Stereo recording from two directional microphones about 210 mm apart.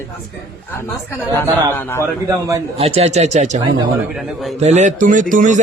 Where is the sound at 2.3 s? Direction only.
15° right (ahead or behind).